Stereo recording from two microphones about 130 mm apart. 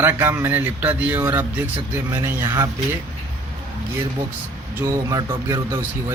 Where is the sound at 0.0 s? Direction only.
20° right (ahead or behind).